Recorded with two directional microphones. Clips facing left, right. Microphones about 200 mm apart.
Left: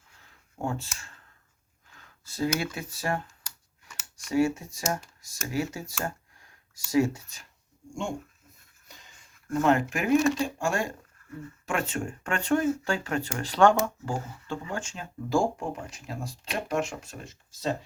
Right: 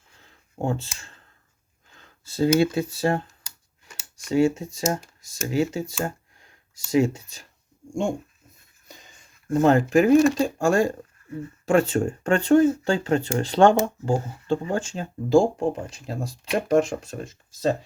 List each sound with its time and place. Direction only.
0.2 s a sound: 25° right (ahead or behind)
1.9 s speech: 25° right (ahead or behind)
9.5 s speech: 35° right (ahead or behind)